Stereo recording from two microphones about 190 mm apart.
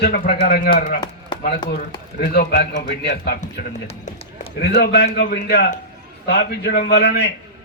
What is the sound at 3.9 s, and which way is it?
Run, 30° left (ahead or behind).